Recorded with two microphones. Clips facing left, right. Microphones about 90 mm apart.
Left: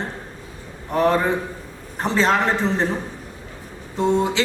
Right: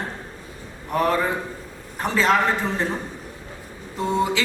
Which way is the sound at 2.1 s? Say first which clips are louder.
Even; 30° left (ahead or behind).